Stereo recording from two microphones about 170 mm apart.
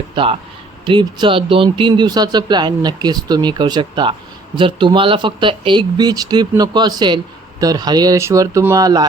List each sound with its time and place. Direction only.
0.2 s speech: 30° right (ahead or behind)